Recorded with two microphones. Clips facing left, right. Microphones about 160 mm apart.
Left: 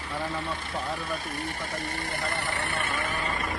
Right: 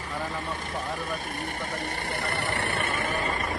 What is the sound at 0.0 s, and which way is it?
Speech, 40° right (ahead or behind).